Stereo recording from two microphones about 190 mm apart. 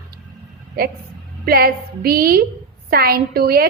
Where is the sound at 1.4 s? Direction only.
55° right (ahead or behind).